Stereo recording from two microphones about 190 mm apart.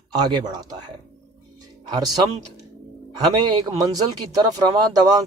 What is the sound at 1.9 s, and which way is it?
Speech, 20° right (ahead or behind).